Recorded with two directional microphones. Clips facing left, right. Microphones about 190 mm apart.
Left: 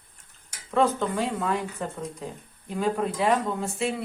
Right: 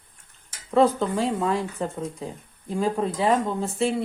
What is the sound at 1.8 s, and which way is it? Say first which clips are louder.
Speech: right 4 dB; 30° right (ahead or behind).